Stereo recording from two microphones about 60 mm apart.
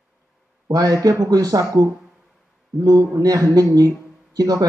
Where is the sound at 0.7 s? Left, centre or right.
Right.